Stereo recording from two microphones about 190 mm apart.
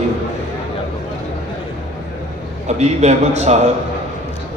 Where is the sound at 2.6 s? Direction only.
35° right (ahead or behind).